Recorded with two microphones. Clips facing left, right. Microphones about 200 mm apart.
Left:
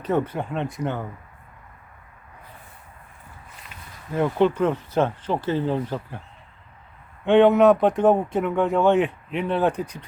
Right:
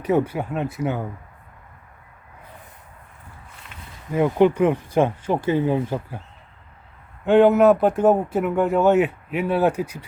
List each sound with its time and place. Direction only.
0.0 s speech: 10° right (ahead or behind)
4.1 s speech: 10° right (ahead or behind)
7.3 s speech: 5° right (ahead or behind)